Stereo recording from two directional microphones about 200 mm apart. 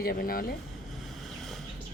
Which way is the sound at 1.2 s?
Centre (ahead or behind).